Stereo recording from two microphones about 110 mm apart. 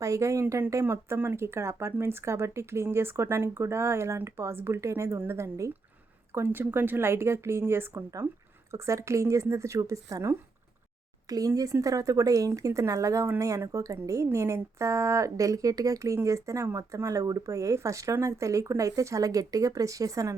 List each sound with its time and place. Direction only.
0.0 s a woman's voice: 30° right (ahead or behind)